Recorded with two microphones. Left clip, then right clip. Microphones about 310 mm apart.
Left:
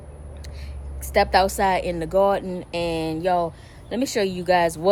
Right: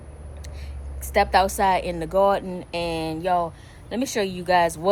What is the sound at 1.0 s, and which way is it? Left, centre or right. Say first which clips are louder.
Speech: left 1 dB; centre.